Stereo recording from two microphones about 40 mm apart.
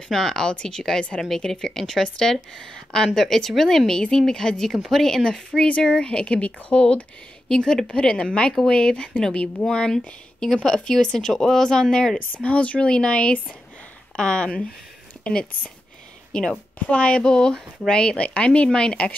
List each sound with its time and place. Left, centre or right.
0.1 s speech: centre
12.4 s speech: left
16.3 s a sound: centre
16.9 s speech: left